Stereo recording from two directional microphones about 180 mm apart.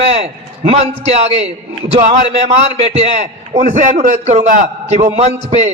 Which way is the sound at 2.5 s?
35° right (ahead or behind).